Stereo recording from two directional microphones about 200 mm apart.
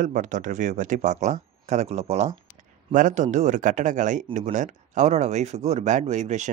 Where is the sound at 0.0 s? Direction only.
40° right (ahead or behind).